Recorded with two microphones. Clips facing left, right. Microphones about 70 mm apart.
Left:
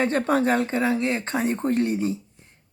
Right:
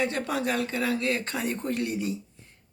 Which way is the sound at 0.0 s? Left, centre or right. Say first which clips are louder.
Left 6 dB; left.